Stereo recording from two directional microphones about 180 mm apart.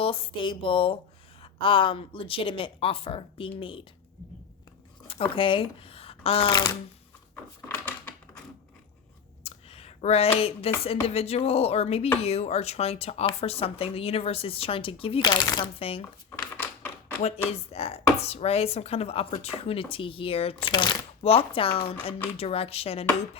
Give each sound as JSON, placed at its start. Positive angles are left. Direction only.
{"t": 0.0, "sound": "speech", "side_deg": 30}
{"t": 5.3, "sound": "speech", "side_deg": 30}
{"t": 9.4, "sound": "a sound", "side_deg": 35}
{"t": 10.8, "sound": "speech", "side_deg": 35}
{"t": 16.3, "sound": "a sound", "side_deg": 15}
{"t": 17.2, "sound": "speech", "side_deg": 35}